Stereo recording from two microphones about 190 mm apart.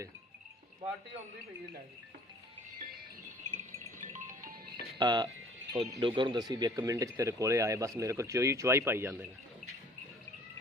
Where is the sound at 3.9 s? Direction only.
40° right (ahead or behind).